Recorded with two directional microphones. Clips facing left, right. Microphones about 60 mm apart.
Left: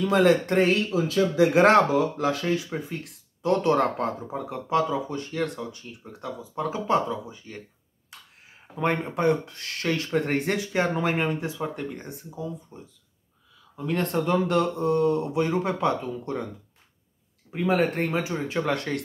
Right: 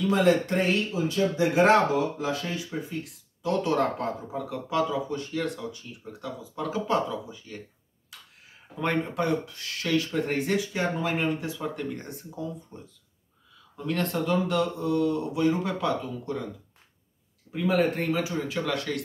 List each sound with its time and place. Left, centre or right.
0.0 s speech: left
0.9 s speech: left
1.6 s speech: left
2.7 s speech: left
8.1 s a sound: left
8.7 s speech: left
11.1 s speech: left
11.6 s speech: centre
13.9 s speech: left
17.5 s speech: left